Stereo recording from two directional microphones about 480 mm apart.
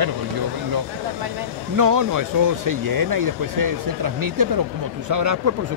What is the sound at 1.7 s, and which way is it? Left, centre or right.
Speech, right.